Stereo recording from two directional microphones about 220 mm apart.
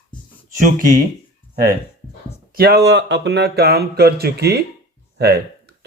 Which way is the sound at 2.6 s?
45° right (ahead or behind).